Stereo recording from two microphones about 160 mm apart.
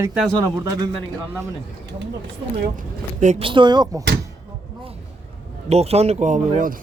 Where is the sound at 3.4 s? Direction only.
30° right (ahead or behind).